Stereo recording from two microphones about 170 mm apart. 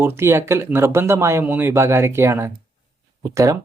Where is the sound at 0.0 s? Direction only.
15° right (ahead or behind).